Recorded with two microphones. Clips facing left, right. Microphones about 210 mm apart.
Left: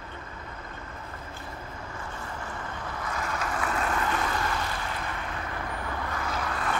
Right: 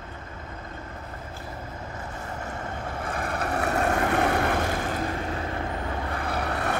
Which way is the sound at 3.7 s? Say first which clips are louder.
Right 6 dB; 45° right (ahead or behind).